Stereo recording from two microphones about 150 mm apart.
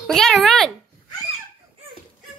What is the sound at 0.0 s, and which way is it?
Speech, centre (ahead or behind).